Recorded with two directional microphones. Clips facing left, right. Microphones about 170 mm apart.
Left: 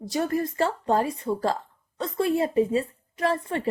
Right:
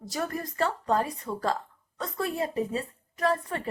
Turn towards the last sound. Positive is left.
turn(degrees=30)  # may be behind; listen again after turning